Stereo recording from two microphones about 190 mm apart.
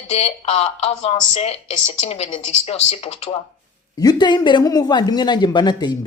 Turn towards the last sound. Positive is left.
turn(degrees=25)  # may be behind; listen again after turning